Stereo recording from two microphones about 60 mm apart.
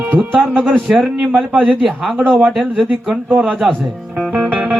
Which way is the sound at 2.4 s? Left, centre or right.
Centre.